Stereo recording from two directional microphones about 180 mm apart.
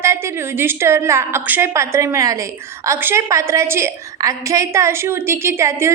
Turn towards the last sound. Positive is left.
turn(degrees=-15)  # may be behind; listen again after turning